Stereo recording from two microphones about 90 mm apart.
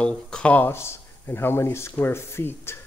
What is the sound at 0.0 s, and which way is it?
Speech, 10° left (ahead or behind).